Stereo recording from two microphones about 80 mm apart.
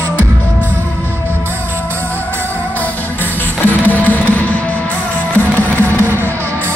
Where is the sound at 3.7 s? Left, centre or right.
Left.